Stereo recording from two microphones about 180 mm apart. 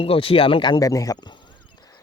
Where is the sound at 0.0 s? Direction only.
30° left (ahead or behind).